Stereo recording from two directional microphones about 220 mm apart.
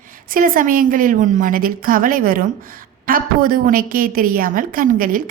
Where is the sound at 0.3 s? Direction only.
40° right (ahead or behind).